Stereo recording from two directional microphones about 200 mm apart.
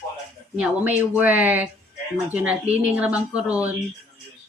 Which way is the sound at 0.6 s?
10° right (ahead or behind).